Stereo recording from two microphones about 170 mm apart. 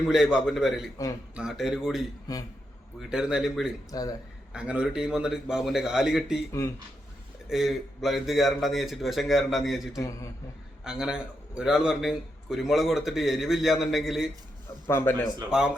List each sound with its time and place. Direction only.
0.1 s a man's voice: 5° right (ahead or behind)
2.3 s a man's voice: 20° left (ahead or behind)
3.1 s a man's voice: 5° right (ahead or behind)
3.9 s a man's voice: 25° left (ahead or behind)
4.5 s a man's voice: 5° right (ahead or behind)
7.5 s a man's voice: centre (ahead or behind)
14.8 s a man's voice: 15° left (ahead or behind)
15.4 s a man's voice: 5° right (ahead or behind)